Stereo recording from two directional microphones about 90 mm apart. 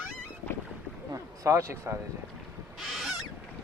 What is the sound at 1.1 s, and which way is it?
Speech, 35° right (ahead or behind).